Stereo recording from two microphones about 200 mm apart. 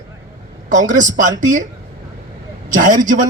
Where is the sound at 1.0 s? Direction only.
40° right (ahead or behind).